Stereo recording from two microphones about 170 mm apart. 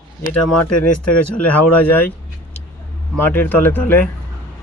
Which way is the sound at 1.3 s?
10° left (ahead or behind).